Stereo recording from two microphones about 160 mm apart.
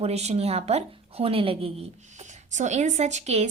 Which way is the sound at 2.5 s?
45° right (ahead or behind).